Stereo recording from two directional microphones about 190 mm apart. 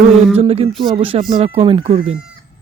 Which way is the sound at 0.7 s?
Centre (ahead or behind).